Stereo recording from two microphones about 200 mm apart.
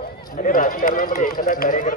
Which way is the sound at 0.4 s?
40° left (ahead or behind).